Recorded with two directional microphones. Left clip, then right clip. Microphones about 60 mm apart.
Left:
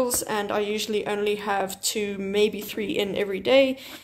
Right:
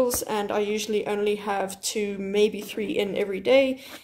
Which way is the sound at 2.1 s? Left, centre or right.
Right.